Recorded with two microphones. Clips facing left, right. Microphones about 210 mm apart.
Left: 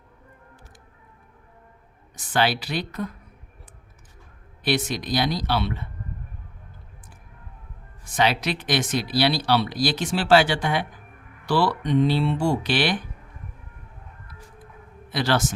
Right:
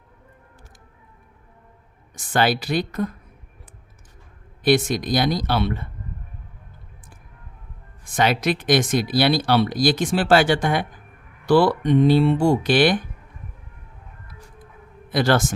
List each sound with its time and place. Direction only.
2.1 s speech: 45° right (ahead or behind)
4.6 s speech: 45° right (ahead or behind)
8.1 s speech: 50° right (ahead or behind)
15.1 s speech: 50° right (ahead or behind)